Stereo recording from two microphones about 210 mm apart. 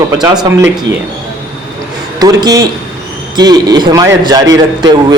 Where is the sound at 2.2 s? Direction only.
20° right (ahead or behind).